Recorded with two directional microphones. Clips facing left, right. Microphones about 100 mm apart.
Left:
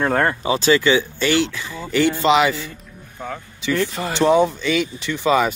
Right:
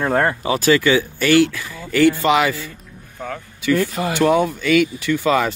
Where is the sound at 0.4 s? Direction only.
25° left (ahead or behind).